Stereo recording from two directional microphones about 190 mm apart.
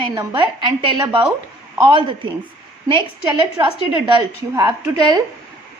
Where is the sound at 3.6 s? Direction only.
20° right (ahead or behind).